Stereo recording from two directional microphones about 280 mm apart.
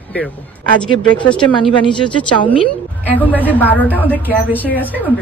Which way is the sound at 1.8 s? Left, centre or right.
Centre.